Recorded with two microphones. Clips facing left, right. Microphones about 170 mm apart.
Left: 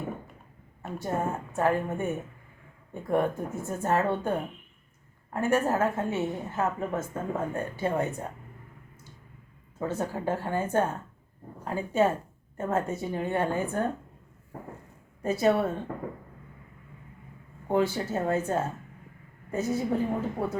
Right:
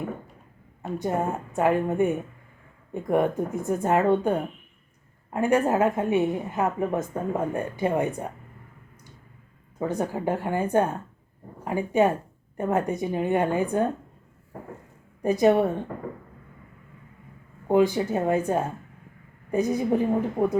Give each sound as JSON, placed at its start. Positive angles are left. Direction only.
{"t": 0.8, "sound": "a sound", "side_deg": -20}
{"t": 1.5, "sound": "a woman's voice", "side_deg": -15}
{"t": 9.7, "sound": "a woman's voice", "side_deg": -15}
{"t": 15.2, "sound": "a woman's voice", "side_deg": -15}
{"t": 17.7, "sound": "a woman's voice", "side_deg": -15}